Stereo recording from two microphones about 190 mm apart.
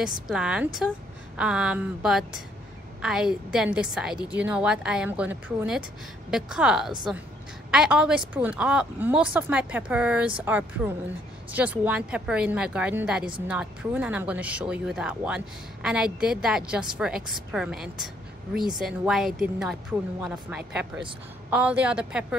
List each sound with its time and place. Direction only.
0.0 s a woman's voice: 5° right (ahead or behind)